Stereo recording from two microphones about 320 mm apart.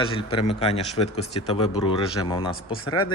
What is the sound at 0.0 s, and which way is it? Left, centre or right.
Speech, centre.